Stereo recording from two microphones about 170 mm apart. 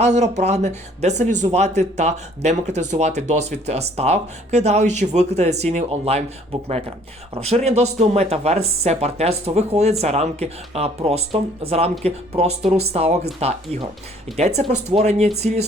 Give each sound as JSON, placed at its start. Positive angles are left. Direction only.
{"t": 0.0, "sound": "speech", "side_deg": -45}